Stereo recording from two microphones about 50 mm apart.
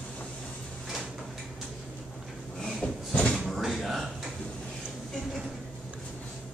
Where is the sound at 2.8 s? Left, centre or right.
Left.